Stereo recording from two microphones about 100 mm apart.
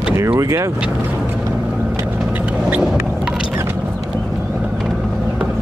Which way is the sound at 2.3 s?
15° right (ahead or behind).